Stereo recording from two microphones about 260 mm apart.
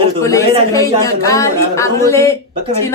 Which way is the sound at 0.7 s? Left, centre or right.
Centre.